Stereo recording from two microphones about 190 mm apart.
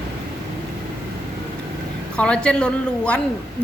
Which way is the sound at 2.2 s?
5° left (ahead or behind).